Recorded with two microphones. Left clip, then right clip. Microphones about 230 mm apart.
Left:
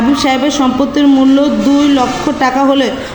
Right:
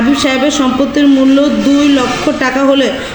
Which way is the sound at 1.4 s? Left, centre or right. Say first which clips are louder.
Right 1 dB; centre.